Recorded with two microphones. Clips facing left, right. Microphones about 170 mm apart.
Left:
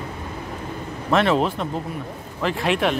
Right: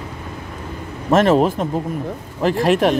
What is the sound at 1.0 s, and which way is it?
Speech, 45° right (ahead or behind).